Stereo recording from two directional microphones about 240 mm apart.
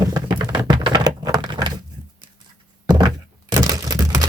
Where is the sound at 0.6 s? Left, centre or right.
Centre.